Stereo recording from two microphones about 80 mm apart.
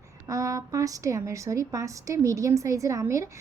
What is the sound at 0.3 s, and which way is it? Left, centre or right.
A woman's voice, right.